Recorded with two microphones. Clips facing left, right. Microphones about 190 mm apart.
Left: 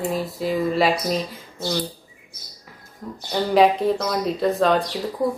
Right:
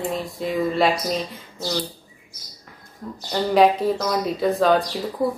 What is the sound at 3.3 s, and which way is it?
Speech, centre (ahead or behind).